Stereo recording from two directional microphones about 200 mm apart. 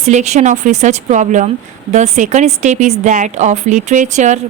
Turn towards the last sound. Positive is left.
turn(degrees=-35)  # may be behind; listen again after turning